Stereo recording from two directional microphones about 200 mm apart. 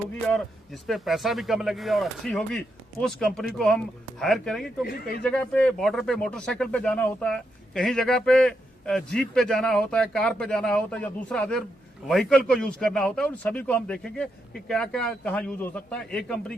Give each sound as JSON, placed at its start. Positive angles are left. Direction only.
{"t": 0.3, "sound": "speech", "side_deg": 0}
{"t": 4.9, "sound": "speech", "side_deg": 50}
{"t": 5.2, "sound": "speech", "side_deg": 5}